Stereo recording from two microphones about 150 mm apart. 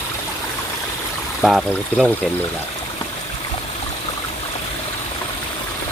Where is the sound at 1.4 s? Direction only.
Centre (ahead or behind).